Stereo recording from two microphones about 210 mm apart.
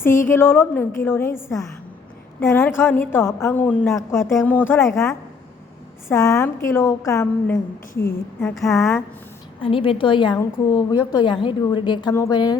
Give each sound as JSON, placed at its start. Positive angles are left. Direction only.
{"t": 0.3, "sound": "a woman's voice", "side_deg": 10}
{"t": 9.6, "sound": "a woman's voice", "side_deg": 25}